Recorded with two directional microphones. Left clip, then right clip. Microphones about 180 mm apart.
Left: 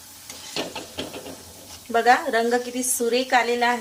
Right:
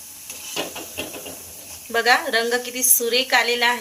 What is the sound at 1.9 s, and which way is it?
A woman's voice, 45° left (ahead or behind).